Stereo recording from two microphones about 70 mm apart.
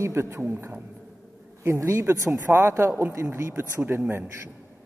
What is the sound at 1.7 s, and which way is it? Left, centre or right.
A man's voice, right.